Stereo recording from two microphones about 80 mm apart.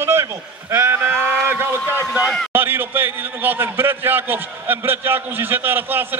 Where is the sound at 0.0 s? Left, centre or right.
Right.